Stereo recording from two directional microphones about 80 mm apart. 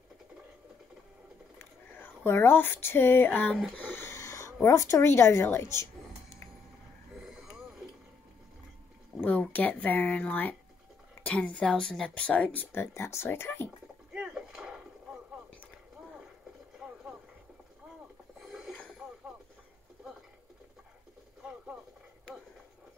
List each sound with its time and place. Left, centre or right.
1.6 s speech: left
3.7 s a sound: left
4.6 s a woman's voice: left
7.2 s a sound: centre
9.2 s a woman's voice: left
12.7 s speech: left
14.1 s a sound: centre
16.8 s boat: centre
18.4 s mechanisms: centre
21.4 s radio: centre